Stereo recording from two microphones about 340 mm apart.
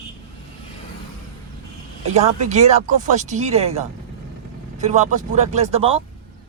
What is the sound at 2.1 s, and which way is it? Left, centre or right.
A man's voice, centre.